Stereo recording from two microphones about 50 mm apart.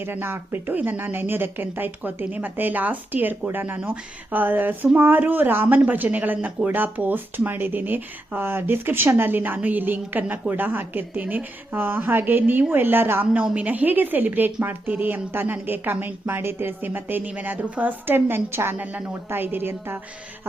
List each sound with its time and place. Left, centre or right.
0.0 s a woman's voice: right
13.5 s a woman's voice: right
18.8 s a woman's voice: right
19.3 s speech: right